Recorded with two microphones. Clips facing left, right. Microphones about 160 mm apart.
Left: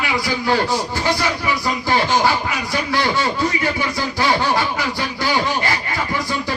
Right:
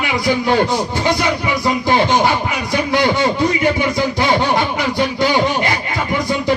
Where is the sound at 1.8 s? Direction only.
20° right (ahead or behind).